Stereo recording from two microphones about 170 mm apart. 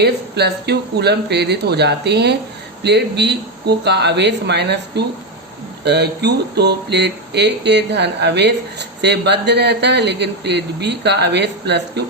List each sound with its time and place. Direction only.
0.0 s speech: 75° right (ahead or behind)